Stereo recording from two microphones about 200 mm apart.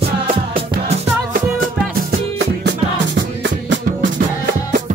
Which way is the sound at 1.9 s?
55° right (ahead or behind).